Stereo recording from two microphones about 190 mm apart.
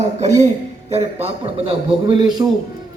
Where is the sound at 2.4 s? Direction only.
15° right (ahead or behind).